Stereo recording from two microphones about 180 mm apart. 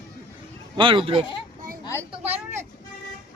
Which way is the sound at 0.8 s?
30° right (ahead or behind).